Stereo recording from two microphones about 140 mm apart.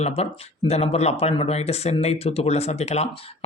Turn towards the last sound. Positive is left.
turn(degrees=50)  # may be behind; listen again after turning